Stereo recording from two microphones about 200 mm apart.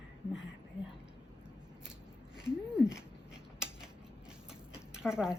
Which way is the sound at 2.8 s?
5° right (ahead or behind).